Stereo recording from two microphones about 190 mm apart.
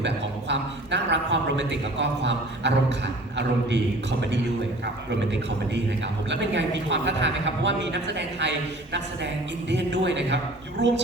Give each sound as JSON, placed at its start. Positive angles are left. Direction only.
{"t": 0.0, "sound": "a man's voice", "side_deg": -70}
{"t": 6.3, "sound": "a woman's voice", "side_deg": -65}